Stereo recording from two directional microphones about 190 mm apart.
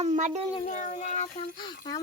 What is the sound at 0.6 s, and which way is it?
Speech, 40° left (ahead or behind).